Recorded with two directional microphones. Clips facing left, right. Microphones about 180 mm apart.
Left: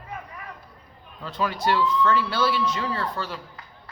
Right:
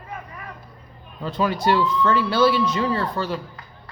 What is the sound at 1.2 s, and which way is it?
Speech, 20° right (ahead or behind).